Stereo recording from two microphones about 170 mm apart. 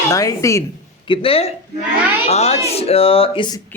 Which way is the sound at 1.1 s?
35° left (ahead or behind).